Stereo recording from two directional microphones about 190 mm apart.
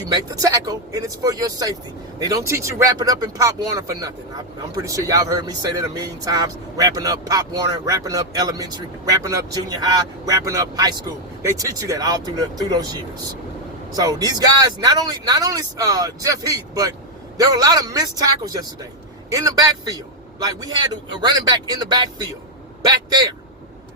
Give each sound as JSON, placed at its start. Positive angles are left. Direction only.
{"t": 0.1, "sound": "speech", "side_deg": -20}